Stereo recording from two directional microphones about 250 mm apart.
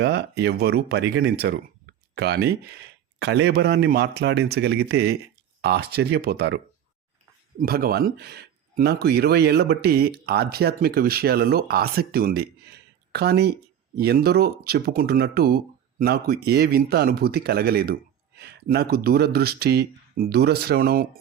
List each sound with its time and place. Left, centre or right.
0.0 s speech: right
7.6 s speech: right